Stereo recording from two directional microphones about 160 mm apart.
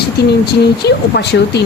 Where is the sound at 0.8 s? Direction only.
90° left.